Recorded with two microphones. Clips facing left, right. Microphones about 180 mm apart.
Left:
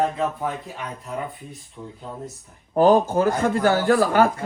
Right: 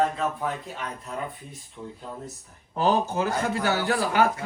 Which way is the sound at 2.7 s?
50° left (ahead or behind).